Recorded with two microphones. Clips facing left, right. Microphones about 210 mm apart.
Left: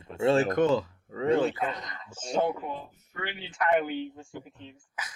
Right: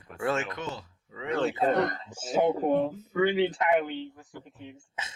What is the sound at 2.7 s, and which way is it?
Speech, 85° right.